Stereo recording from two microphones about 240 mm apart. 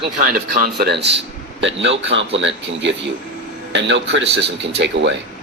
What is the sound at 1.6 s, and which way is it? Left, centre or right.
A man's voice, right.